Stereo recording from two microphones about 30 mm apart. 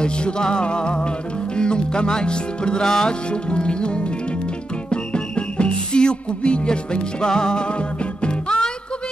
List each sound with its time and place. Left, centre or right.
0.0 s music: left